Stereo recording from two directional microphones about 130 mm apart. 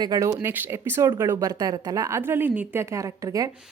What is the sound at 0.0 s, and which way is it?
Speech, 30° right (ahead or behind).